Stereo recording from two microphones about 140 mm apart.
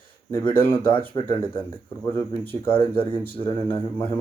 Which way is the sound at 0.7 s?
40° left (ahead or behind).